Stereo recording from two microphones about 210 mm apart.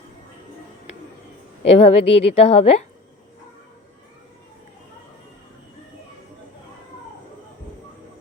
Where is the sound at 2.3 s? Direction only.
30° left (ahead or behind).